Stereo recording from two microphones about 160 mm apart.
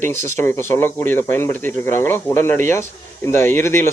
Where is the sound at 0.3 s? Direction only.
15° left (ahead or behind).